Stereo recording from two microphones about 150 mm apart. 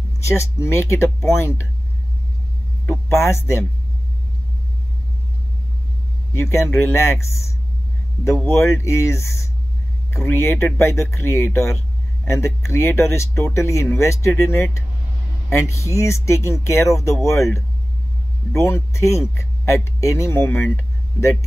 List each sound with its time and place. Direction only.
0.2 s speech: 15° left (ahead or behind)
2.9 s speech: 20° left (ahead or behind)
6.3 s speech: 15° left (ahead or behind)
8.5 s speech: 15° left (ahead or behind)